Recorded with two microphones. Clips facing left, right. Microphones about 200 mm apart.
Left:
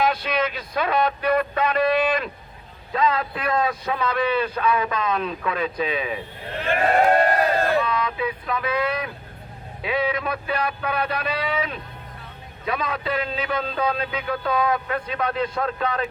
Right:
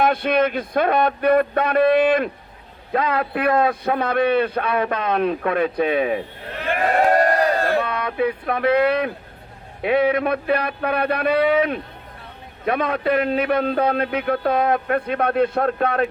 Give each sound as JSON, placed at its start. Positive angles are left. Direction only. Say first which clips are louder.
{"t": 0.0, "sound": "a man's voice", "louder": "right 5 dB", "side_deg": -55}
{"t": 7.7, "sound": "a man's voice", "louder": "right 1 dB", "side_deg": -60}